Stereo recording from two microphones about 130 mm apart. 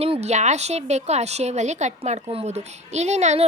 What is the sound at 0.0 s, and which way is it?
A woman's voice, 55° right (ahead or behind).